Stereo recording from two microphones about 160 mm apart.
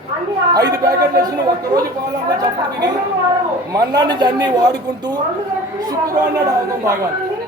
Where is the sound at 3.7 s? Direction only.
25° right (ahead or behind).